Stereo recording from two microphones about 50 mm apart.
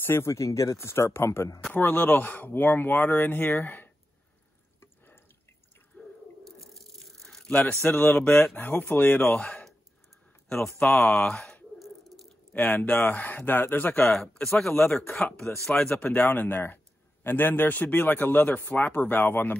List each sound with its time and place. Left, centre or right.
0.0 s speech: left
0.3 s speech: left
1.7 s a man's voice: left
5.9 s drip: left
6.6 s tearing: centre
7.8 s a man's voice: left
9.3 s speech: centre
11.8 s drip: centre
12.5 s a man's voice: left
14.1 s speech: centre
15.8 s speech: left
16.2 s a man's voice: left